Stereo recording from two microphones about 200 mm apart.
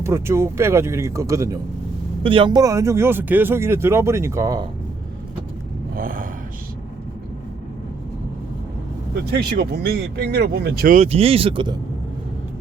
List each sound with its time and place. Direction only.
0.0 s speech: 15° right (ahead or behind)
6.0 s speech: 45° right (ahead or behind)
9.3 s speech: 50° right (ahead or behind); by 11.8 s 25° right (ahead or behind)